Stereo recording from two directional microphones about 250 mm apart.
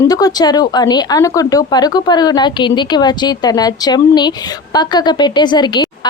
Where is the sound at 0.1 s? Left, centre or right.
Centre.